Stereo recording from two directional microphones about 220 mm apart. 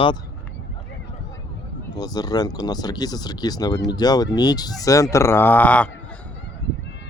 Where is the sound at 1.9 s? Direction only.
15° left (ahead or behind).